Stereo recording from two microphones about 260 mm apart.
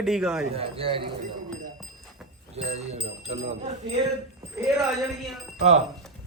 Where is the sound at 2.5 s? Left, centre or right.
Right.